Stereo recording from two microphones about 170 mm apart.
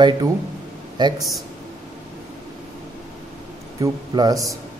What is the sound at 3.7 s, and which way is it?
Speech, 20° right (ahead or behind).